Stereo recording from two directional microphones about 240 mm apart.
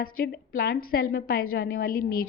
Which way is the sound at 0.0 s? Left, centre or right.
Left.